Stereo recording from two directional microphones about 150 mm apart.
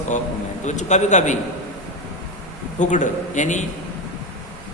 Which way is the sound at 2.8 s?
55° left (ahead or behind).